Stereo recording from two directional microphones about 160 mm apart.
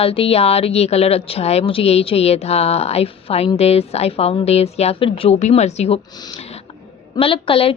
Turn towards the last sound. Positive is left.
turn(degrees=35)  # may be behind; listen again after turning